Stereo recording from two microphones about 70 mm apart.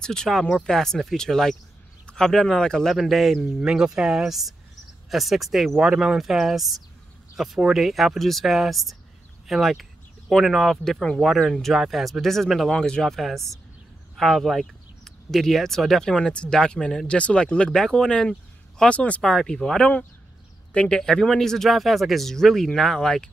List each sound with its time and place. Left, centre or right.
0.0 s speech: centre
3.0 s speech: centre
21.0 s speech: centre